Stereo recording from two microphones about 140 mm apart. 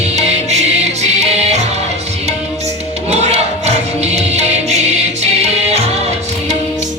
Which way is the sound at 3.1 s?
50° right (ahead or behind).